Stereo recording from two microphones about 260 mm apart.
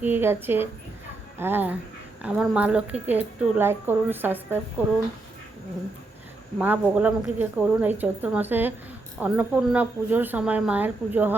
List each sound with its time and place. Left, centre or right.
0.0 s a woman's voice: centre
6.6 s a woman's voice: centre